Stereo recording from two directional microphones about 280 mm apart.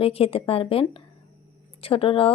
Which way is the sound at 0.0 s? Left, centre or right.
Centre.